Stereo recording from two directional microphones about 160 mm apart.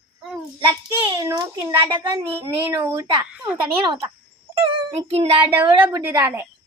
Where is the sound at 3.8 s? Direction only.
35° right (ahead or behind).